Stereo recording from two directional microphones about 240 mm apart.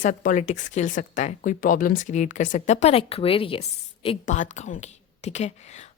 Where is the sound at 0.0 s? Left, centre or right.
Left.